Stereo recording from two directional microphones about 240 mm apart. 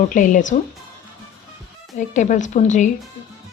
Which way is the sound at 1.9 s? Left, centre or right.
Left.